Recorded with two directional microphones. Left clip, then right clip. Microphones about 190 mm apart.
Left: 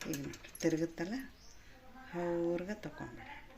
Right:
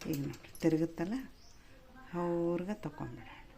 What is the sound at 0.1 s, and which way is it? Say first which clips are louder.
Speech: right 3 dB; 50° right (ahead or behind).